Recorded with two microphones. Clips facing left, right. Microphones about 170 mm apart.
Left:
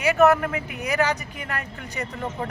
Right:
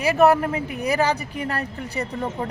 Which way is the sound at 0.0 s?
35° right (ahead or behind).